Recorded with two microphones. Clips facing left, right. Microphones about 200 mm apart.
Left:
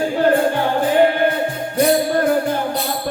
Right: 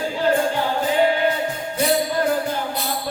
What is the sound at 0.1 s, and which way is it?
Music, 55° left (ahead or behind).